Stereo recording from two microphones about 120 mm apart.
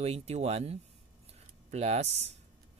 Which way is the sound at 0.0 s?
60° right (ahead or behind).